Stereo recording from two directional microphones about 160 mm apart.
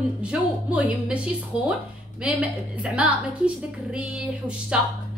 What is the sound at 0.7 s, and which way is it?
Speech, 10° right (ahead or behind).